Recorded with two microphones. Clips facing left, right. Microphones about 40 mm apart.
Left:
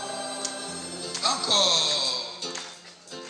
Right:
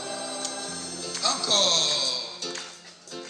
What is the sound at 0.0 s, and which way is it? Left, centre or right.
Music, left.